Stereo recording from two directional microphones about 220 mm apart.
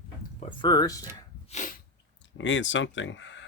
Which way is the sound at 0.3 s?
20° left (ahead or behind).